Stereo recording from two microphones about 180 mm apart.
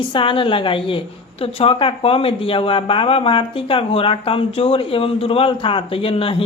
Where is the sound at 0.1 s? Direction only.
30° left (ahead or behind).